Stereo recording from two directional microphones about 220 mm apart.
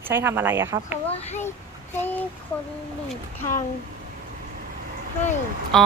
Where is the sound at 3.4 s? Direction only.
10° left (ahead or behind).